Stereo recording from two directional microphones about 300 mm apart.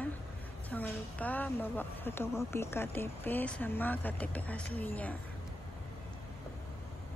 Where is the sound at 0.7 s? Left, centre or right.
Centre.